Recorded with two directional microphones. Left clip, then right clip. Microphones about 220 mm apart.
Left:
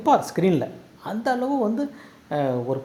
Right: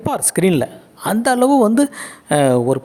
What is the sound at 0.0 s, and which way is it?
A woman's voice, 40° right (ahead or behind).